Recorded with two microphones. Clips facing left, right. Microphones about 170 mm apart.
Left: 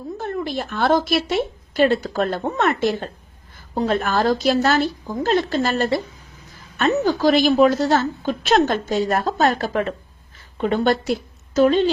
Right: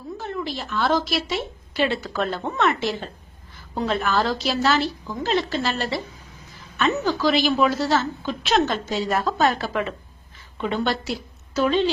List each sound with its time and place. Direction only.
0.2 s a woman's voice: 50° left (ahead or behind)